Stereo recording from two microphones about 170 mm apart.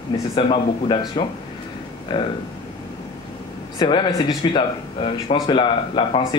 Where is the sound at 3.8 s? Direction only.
30° left (ahead or behind).